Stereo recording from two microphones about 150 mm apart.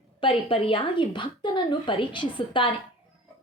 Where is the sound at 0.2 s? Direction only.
35° left (ahead or behind).